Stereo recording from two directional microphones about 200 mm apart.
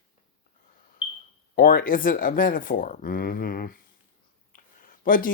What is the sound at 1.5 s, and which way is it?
Speech, 45° left (ahead or behind).